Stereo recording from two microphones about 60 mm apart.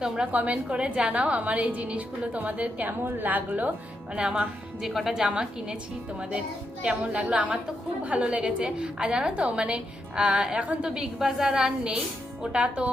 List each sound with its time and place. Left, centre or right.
0.3 s a woman's voice: right
4.1 s a woman's voice: centre
6.8 s a woman's voice: centre